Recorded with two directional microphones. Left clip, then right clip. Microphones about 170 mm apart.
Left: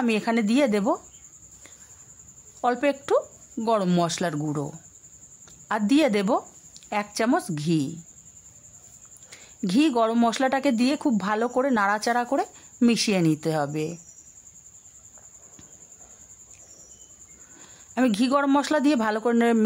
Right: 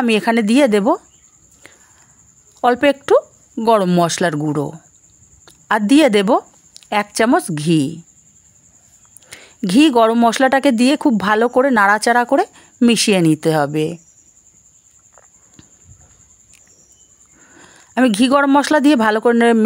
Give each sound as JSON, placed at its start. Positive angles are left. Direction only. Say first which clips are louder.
{"t": 0.0, "sound": "speech", "louder": "right 9 dB", "side_deg": -35}
{"t": 2.6, "sound": "speech", "louder": "right 10 dB", "side_deg": -35}
{"t": 9.3, "sound": "speech", "louder": "right 9 dB", "side_deg": -35}
{"t": 17.6, "sound": "speech", "louder": "right 9 dB", "side_deg": -35}